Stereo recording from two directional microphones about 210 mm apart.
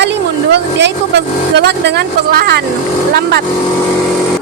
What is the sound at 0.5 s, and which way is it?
Speech, 55° right (ahead or behind).